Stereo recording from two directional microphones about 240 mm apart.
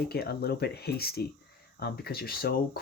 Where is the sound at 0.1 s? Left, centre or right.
Left.